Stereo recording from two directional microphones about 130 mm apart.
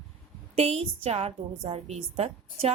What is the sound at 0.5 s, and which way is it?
A woman's voice, 50° right (ahead or behind).